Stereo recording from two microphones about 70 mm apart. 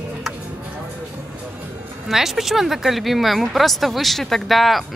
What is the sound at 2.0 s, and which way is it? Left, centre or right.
Speech, centre.